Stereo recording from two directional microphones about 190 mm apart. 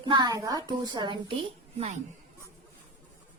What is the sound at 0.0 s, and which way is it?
A woman's voice, 25° right (ahead or behind).